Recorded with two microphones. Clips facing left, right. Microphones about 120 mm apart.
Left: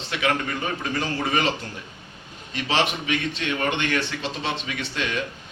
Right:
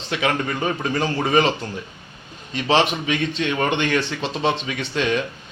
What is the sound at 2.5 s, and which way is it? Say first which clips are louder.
A man's voice: right 5 dB; 25° right (ahead or behind).